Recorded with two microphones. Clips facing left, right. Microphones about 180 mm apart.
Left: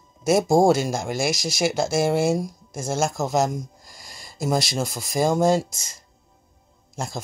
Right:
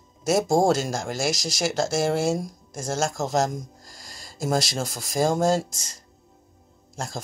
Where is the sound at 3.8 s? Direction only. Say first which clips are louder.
Even; 45° right (ahead or behind).